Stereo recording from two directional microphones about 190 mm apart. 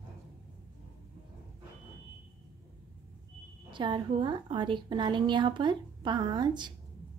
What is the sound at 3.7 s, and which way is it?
A woman's voice, 25° right (ahead or behind).